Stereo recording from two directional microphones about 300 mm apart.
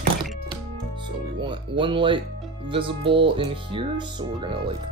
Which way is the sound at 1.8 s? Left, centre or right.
Centre.